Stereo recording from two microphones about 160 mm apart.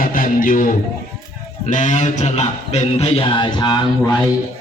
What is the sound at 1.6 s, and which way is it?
Speech, 50° left (ahead or behind).